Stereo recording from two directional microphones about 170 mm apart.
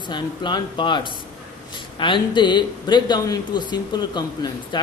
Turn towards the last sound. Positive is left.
turn(degrees=25)  # may be behind; listen again after turning